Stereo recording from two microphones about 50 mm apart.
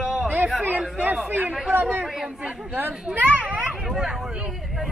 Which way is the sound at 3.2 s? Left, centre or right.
Right.